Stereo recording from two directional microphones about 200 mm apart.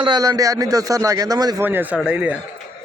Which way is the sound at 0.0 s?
20° right (ahead or behind).